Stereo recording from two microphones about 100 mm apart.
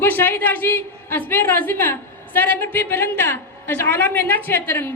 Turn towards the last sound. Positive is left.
turn(degrees=20)  # may be behind; listen again after turning